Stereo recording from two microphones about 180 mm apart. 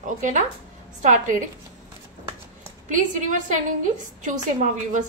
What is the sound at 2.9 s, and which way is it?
A woman's voice, 45° right (ahead or behind).